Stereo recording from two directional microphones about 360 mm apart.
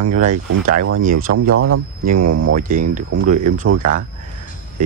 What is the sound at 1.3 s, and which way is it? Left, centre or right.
Cricket, right.